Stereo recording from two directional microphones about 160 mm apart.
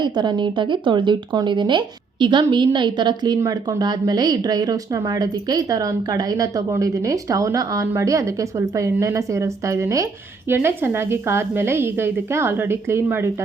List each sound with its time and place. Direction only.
0.0 s a woman's voice: 30° right (ahead or behind)